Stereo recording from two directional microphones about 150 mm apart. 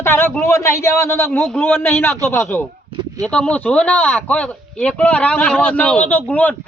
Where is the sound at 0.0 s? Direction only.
15° left (ahead or behind).